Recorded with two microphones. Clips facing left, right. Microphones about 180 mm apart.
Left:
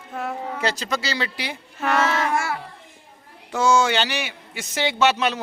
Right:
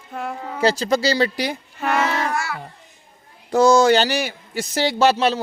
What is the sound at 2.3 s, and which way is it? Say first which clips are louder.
Child singing: left 2 dB; 50° left (ahead or behind).